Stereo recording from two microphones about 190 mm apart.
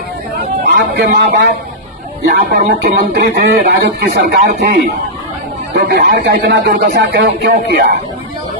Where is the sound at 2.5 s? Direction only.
55° right (ahead or behind).